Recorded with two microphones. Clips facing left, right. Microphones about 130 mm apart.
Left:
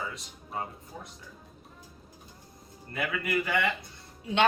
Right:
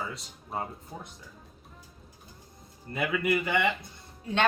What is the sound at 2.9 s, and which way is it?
Speech, 20° right (ahead or behind).